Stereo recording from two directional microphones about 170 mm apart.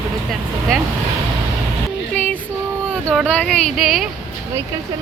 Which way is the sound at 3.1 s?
5° left (ahead or behind).